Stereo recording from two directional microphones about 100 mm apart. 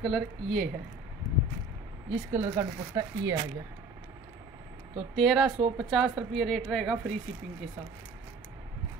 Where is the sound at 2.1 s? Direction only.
20° right (ahead or behind).